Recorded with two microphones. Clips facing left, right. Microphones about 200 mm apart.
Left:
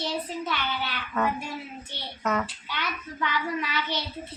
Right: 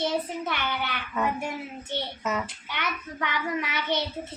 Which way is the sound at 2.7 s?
20° right (ahead or behind).